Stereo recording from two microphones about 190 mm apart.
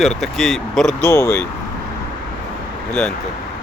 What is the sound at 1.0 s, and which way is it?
Speech, 15° left (ahead or behind).